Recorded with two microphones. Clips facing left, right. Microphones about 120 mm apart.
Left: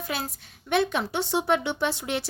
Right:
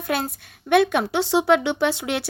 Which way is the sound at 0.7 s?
70° right (ahead or behind).